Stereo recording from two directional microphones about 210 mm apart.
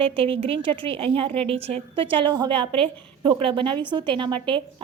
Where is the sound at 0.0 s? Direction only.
25° right (ahead or behind).